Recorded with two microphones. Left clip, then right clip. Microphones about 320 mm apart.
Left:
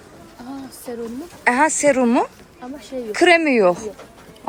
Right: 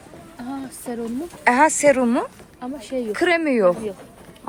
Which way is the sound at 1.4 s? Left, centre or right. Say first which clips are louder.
Right 1 dB; centre.